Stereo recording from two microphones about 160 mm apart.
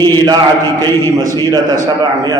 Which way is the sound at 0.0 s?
25° right (ahead or behind).